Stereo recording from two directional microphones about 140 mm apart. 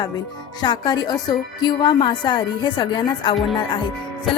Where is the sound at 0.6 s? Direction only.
30° left (ahead or behind).